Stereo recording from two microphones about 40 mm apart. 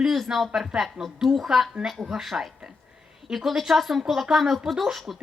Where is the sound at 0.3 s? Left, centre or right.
Centre.